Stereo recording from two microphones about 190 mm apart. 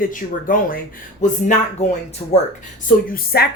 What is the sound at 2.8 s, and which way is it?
Speech, 50° left (ahead or behind).